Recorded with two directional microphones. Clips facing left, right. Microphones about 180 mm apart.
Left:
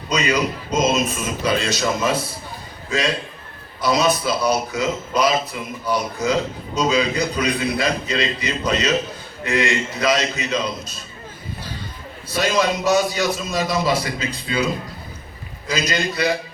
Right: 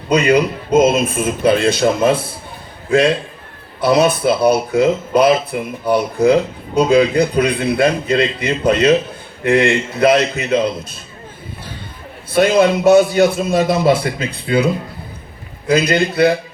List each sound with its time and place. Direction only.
0.1 s speech: 55° right (ahead or behind)
12.3 s speech: 55° right (ahead or behind)